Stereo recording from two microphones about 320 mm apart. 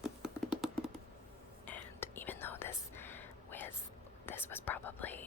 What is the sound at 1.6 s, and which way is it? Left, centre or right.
Whispering, centre.